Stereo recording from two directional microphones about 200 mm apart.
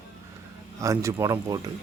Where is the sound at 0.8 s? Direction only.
15° right (ahead or behind).